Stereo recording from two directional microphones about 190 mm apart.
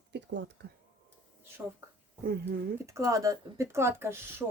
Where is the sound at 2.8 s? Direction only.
15° right (ahead or behind).